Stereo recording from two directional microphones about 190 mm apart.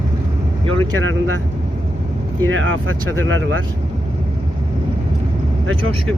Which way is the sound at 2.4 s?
90° right.